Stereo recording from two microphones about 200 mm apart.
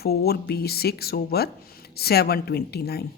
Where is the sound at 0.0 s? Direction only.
50° left (ahead or behind).